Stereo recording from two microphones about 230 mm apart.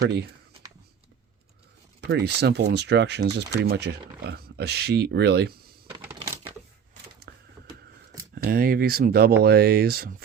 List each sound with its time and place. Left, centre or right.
2.0 s speech: right
6.1 s typewriter: centre
7.3 s power windows: right
8.4 s speech: right